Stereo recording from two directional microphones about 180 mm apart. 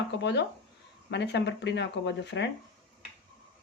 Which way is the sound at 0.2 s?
75° left (ahead or behind).